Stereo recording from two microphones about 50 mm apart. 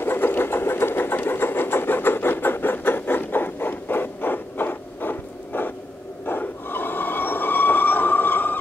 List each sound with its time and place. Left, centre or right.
0.0 s engine: left
6.2 s train: left